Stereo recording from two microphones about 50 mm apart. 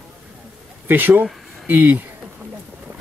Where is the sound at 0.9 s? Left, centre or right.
Right.